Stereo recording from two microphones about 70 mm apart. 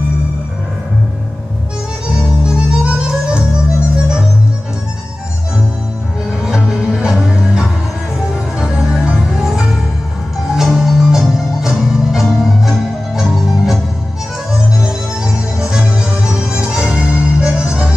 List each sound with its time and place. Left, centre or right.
2.4 s music: centre
6.4 s music: centre